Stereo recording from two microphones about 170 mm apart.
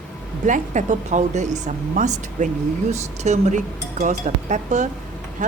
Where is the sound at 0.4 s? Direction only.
45° right (ahead or behind).